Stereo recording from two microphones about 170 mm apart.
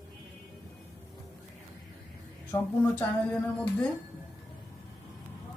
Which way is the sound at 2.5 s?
20° left (ahead or behind).